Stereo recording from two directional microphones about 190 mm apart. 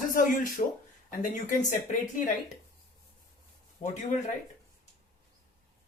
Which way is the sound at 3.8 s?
40° left (ahead or behind).